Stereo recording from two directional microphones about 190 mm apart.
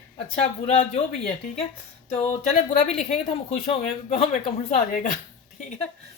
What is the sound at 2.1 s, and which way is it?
A woman's voice, 35° left (ahead or behind).